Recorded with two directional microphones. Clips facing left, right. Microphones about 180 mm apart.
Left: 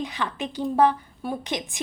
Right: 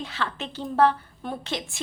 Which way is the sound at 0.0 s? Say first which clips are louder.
Left 3 dB; 15° left (ahead or behind).